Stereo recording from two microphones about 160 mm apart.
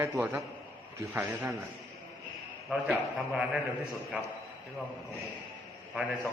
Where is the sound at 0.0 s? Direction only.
15° right (ahead or behind).